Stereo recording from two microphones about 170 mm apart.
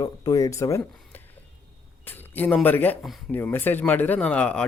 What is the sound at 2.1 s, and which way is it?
Speech, 10° left (ahead or behind).